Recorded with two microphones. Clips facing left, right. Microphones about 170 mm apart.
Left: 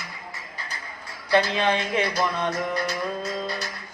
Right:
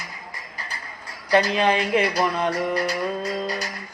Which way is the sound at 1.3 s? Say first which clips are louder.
Right 2 dB; 40° right (ahead or behind).